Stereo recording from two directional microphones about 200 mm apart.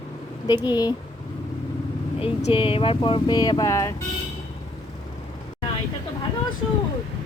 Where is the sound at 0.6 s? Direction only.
20° left (ahead or behind).